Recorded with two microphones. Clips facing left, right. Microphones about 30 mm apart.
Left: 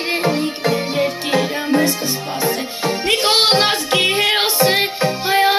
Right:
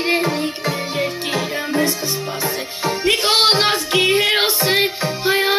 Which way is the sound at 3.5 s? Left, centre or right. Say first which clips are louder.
Left 1 dB; left.